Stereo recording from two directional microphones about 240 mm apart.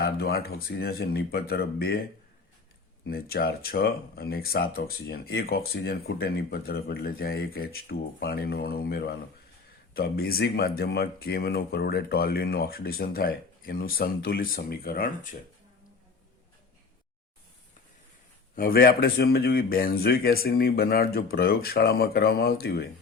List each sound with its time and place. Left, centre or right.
0.0 s speech: left
18.5 s speech: left